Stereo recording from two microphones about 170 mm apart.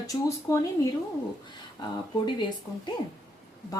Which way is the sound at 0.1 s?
20° left (ahead or behind).